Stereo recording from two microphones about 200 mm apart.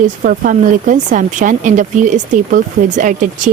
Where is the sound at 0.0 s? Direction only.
40° right (ahead or behind).